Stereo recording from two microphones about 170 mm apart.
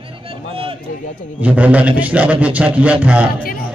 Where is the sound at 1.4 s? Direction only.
10° right (ahead or behind).